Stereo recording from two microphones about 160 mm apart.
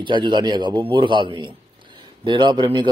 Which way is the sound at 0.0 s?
30° right (ahead or behind).